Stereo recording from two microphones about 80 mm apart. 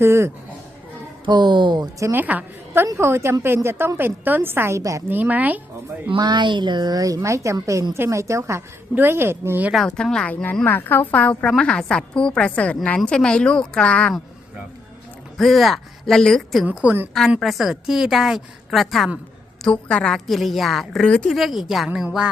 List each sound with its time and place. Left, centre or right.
0.0 s a woman's voice: right
1.2 s speech: right
2.1 s a woman's voice: right
2.8 s a woman's voice: right
4.8 s a woman's voice: right
5.0 s a woman's voice: right
6.1 s a woman's voice: right
9.7 s a woman's voice: centre
15.4 s a woman's voice: centre
16.6 s a woman's voice: right
17.4 s a woman's voice: centre
19.6 s a woman's voice: centre
22.0 s music: centre